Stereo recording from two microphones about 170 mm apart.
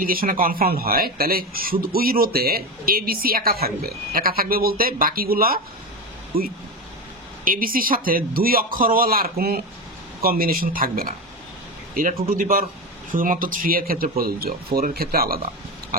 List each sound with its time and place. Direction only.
0.0 s speech: 60° right (ahead or behind)
15.9 s tick-tock: 60° right (ahead or behind)